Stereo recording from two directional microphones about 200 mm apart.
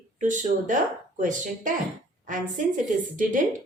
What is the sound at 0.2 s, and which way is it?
A woman's voice, 40° right (ahead or behind).